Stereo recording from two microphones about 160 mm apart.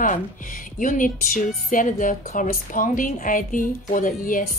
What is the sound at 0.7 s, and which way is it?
A woman's voice, 55° left (ahead or behind).